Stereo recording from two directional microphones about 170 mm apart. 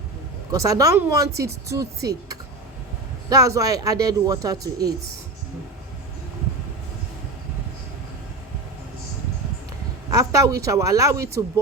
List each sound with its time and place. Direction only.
0.5 s speech: 20° right (ahead or behind)
3.2 s speech: 20° right (ahead or behind)
10.1 s speech: 20° right (ahead or behind)